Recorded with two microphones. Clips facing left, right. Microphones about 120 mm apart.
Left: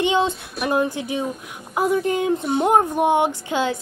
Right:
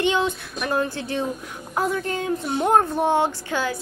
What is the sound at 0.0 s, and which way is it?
A woman's voice, 20° left (ahead or behind).